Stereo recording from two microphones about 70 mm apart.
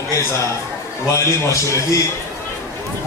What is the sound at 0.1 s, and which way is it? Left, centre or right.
A man's voice, left.